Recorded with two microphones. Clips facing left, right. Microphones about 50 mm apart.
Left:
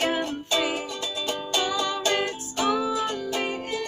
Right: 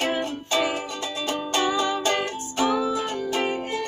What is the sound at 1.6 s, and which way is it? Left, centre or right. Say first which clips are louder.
Music: right 4 dB; centre.